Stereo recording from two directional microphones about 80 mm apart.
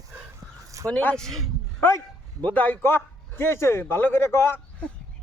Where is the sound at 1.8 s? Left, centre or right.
Left.